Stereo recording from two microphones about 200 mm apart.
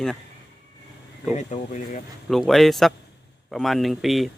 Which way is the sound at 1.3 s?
35° left (ahead or behind).